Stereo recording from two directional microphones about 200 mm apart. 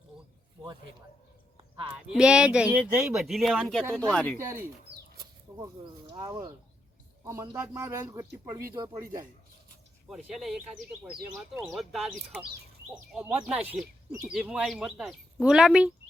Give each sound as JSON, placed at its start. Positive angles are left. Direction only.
{"t": 2.0, "sound": "speech", "side_deg": -5}
{"t": 4.4, "sound": "a man's voice", "side_deg": -15}
{"t": 10.1, "sound": "speech", "side_deg": 0}